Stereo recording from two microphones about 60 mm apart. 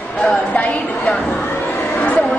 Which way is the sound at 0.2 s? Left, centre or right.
Left.